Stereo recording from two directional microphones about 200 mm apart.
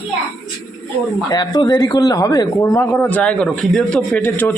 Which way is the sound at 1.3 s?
20° left (ahead or behind).